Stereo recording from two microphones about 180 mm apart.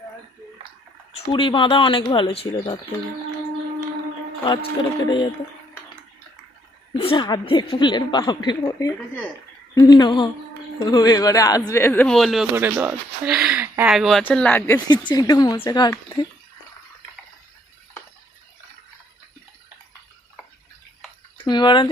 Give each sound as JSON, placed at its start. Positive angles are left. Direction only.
{"t": 1.1, "sound": "a woman's voice", "side_deg": 25}
{"t": 4.4, "sound": "a woman's voice", "side_deg": 25}
{"t": 6.9, "sound": "a woman's voice", "side_deg": 30}
{"t": 12.5, "sound": "speech", "side_deg": -10}
{"t": 14.8, "sound": "a woman's voice", "side_deg": 25}
{"t": 21.3, "sound": "speech", "side_deg": 25}